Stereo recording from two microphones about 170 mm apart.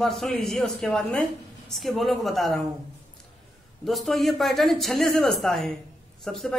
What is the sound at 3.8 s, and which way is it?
A woman's voice, centre (ahead or behind).